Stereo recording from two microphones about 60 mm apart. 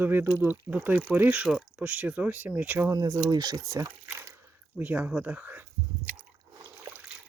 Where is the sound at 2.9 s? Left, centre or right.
Right.